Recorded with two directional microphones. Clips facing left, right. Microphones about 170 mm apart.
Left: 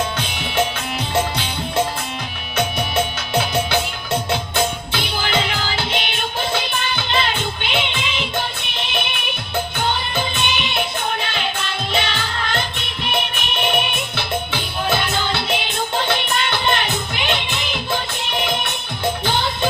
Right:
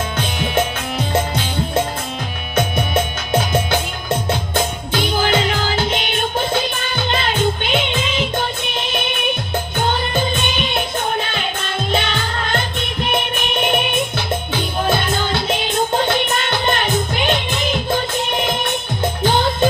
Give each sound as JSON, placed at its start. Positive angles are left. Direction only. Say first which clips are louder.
{"t": 2.6, "sound": "music", "louder": "right 2 dB", "side_deg": -50}
{"t": 4.9, "sound": "music", "louder": "right 6 dB", "side_deg": -45}
{"t": 10.3, "sound": "music", "louder": "right 2 dB", "side_deg": -50}
{"t": 11.9, "sound": "music", "louder": "right 3 dB", "side_deg": -50}
{"t": 19.2, "sound": "music", "louder": "right 5 dB", "side_deg": -45}